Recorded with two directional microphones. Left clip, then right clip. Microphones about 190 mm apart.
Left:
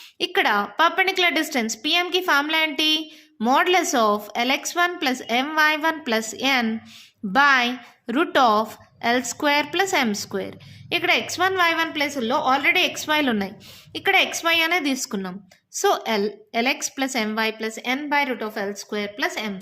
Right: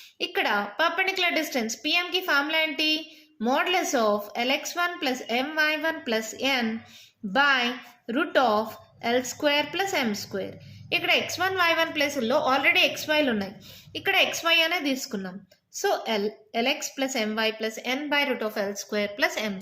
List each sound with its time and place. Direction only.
0.2 s a woman's voice: 40° left (ahead or behind); by 19.5 s 20° left (ahead or behind)